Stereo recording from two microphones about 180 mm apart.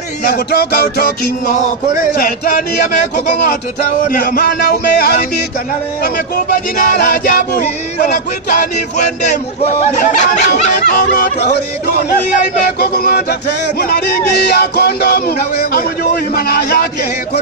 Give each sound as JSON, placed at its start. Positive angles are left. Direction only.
{"t": 0.2, "sound": "music", "side_deg": 60}
{"t": 2.1, "sound": "speech", "side_deg": 55}
{"t": 4.1, "sound": "music", "side_deg": 55}
{"t": 6.0, "sound": "speech", "side_deg": 55}
{"t": 12.7, "sound": "music", "side_deg": 55}